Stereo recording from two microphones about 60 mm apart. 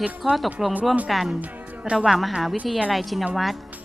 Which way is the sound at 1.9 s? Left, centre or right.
Centre.